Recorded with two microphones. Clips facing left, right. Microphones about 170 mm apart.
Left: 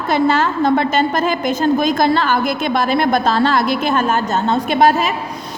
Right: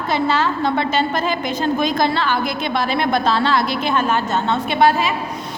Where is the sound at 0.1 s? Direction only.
50° left (ahead or behind).